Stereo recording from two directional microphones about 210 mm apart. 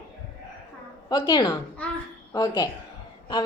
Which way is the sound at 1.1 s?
20° left (ahead or behind).